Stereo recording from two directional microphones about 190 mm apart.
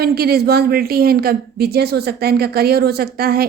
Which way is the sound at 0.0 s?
55° right (ahead or behind).